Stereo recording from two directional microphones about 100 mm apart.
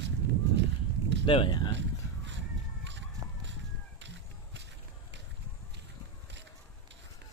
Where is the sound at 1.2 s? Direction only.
60° left (ahead or behind).